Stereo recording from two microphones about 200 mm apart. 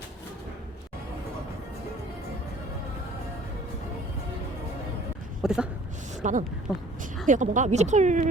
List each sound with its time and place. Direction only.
5.4 s a sound: 5° right (ahead or behind)
6.2 s speech: 35° right (ahead or behind)
6.7 s a woman's voice: centre (ahead or behind)
7.3 s speech: 40° right (ahead or behind)